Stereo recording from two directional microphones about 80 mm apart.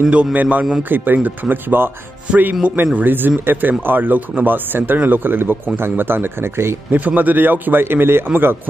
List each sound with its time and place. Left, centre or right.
0.1 s a man's voice: centre; by 6.8 s right
6.9 s speech: centre